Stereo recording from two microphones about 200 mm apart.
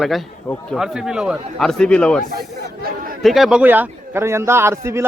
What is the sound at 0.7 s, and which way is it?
A man's voice, centre (ahead or behind).